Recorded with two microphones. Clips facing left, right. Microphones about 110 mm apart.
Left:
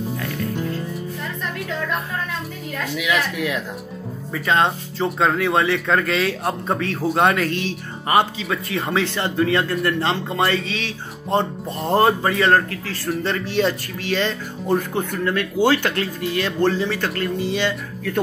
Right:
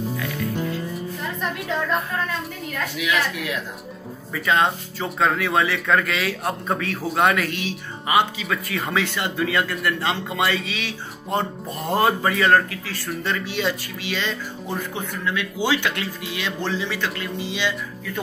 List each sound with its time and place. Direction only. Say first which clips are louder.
4.3 s speech: left 1 dB; 30° left (ahead or behind); by 17.7 s 45° left (ahead or behind)